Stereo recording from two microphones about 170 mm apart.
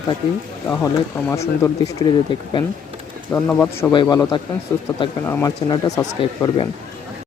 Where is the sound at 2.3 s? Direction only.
30° left (ahead or behind).